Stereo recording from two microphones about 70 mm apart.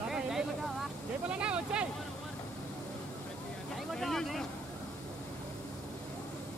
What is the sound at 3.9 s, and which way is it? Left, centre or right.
Vehicle, centre.